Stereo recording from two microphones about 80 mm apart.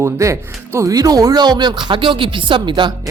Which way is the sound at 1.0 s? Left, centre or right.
Right.